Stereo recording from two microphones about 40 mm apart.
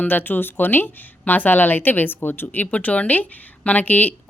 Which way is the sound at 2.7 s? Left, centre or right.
Left.